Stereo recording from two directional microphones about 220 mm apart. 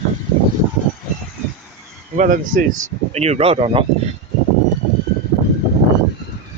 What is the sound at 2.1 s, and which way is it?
Speech, 35° right (ahead or behind).